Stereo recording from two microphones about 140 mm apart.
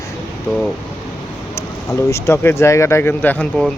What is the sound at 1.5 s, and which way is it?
Speech, 20° left (ahead or behind).